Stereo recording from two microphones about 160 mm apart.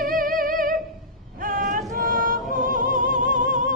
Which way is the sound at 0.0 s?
60° right (ahead or behind).